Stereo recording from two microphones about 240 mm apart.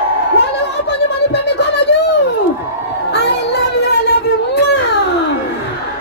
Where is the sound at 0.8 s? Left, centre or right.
Left.